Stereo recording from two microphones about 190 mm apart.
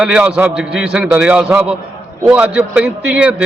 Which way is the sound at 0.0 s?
5° right (ahead or behind).